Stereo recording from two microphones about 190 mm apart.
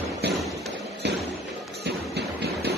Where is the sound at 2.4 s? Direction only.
60° right (ahead or behind).